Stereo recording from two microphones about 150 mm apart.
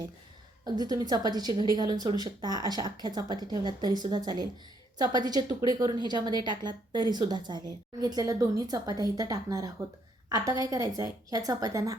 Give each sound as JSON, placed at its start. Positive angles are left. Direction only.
{"t": 0.6, "sound": "a woman's voice", "side_deg": -25}